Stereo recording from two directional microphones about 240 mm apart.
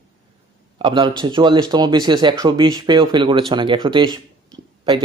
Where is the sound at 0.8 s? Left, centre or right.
Centre.